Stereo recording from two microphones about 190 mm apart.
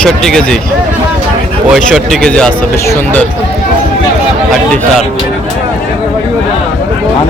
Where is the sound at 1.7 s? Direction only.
5° right (ahead or behind).